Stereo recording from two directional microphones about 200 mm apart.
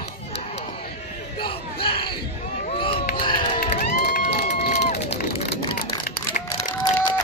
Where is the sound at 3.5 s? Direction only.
40° left (ahead or behind).